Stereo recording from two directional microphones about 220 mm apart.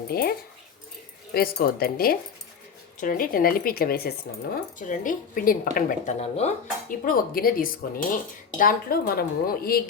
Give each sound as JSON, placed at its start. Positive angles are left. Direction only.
{"t": 0.1, "sound": "speech", "side_deg": 45}